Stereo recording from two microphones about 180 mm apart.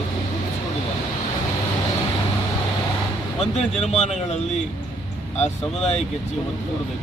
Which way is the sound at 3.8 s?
35° left (ahead or behind).